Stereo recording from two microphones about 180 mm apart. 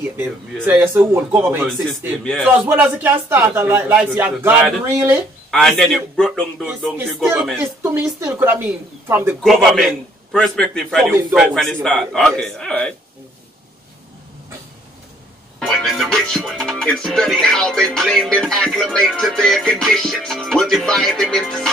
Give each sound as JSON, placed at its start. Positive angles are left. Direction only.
{"t": 0.7, "sound": "speech", "side_deg": -15}
{"t": 2.2, "sound": "speech", "side_deg": 5}
{"t": 2.6, "sound": "speech", "side_deg": -10}
{"t": 5.5, "sound": "speech", "side_deg": 5}
{"t": 7.8, "sound": "speech", "side_deg": -15}
{"t": 9.4, "sound": "speech", "side_deg": 0}
{"t": 11.1, "sound": "speech", "side_deg": -15}
{"t": 11.3, "sound": "speech", "side_deg": 0}
{"t": 15.6, "sound": "speech", "side_deg": 0}